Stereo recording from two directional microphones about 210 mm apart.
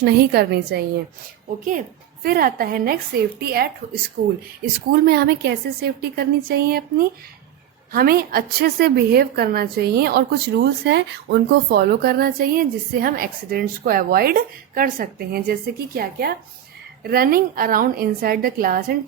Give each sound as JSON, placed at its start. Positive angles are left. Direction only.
{"t": 0.0, "sound": "a woman's voice", "side_deg": -50}
{"t": 2.2, "sound": "a woman's voice", "side_deg": -45}
{"t": 4.9, "sound": "a woman's voice", "side_deg": -50}